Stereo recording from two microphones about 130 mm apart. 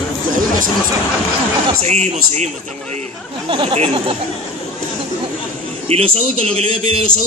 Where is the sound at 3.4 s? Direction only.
45° right (ahead or behind).